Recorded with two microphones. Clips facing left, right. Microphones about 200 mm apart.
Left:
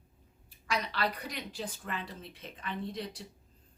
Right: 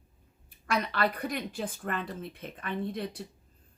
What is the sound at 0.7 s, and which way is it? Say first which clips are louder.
Speech: right 4 dB; 55° right (ahead or behind).